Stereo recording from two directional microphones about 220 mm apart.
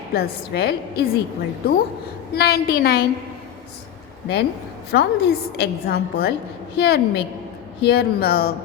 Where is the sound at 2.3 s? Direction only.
45° left (ahead or behind).